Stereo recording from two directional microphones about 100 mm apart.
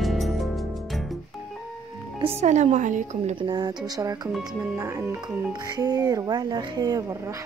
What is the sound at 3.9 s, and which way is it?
A woman's voice, 35° right (ahead or behind).